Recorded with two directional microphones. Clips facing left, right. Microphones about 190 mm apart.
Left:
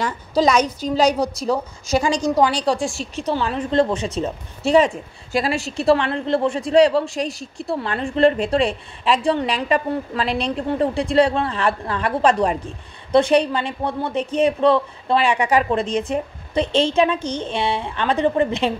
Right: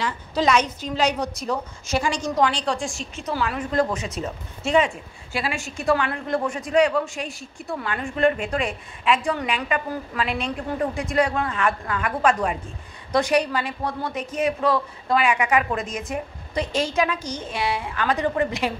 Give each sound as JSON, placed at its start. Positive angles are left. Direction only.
{"t": 0.0, "sound": "a woman's voice", "side_deg": 40}